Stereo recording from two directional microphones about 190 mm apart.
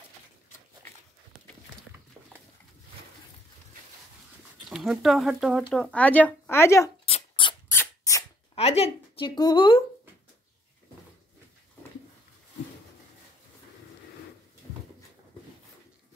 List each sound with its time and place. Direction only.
4.6 s speech: centre (ahead or behind)
7.1 s dog: 30° left (ahead or behind)
7.7 s a sound: 15° left (ahead or behind)
8.5 s speech: 35° left (ahead or behind)